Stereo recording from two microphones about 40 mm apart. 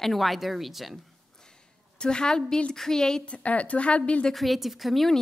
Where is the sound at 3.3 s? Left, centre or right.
Left.